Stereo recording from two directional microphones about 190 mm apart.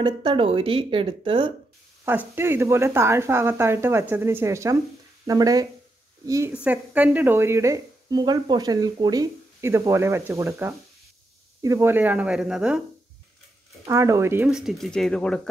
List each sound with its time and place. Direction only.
0.0 s speech: 25° right (ahead or behind)
2.0 s speech: 10° right (ahead or behind)
13.8 s speech: 15° right (ahead or behind); by 15.4 s 5° left (ahead or behind)